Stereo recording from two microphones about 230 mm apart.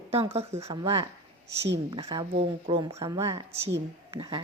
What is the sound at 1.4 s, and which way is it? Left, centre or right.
Speech, right.